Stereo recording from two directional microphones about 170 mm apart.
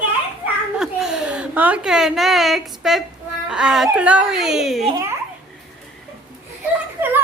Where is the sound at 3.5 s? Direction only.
5° right (ahead or behind).